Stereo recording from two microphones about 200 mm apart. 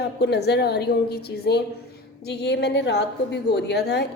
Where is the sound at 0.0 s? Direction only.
55° left (ahead or behind).